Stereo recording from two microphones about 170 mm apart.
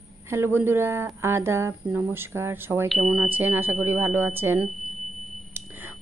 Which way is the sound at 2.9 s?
5° right (ahead or behind).